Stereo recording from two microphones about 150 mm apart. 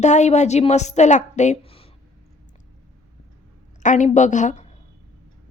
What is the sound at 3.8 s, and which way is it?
Speech, 55° left (ahead or behind).